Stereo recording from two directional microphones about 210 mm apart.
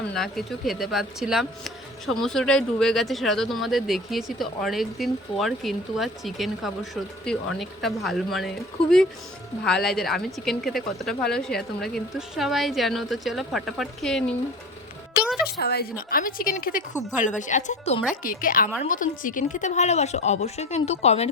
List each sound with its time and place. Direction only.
0.1 s speech: centre (ahead or behind)
15.2 s music: 5° right (ahead or behind)
15.4 s a woman's voice: 50° left (ahead or behind); by 21.2 s 30° left (ahead or behind)